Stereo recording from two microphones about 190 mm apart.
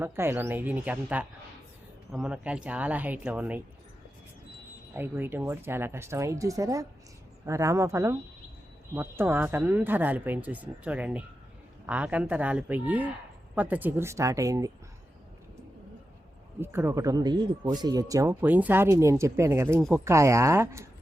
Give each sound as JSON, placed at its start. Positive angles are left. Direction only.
{"t": 0.0, "sound": "speech", "side_deg": -10}
{"t": 4.9, "sound": "speech", "side_deg": -10}
{"t": 16.6, "sound": "speech", "side_deg": -10}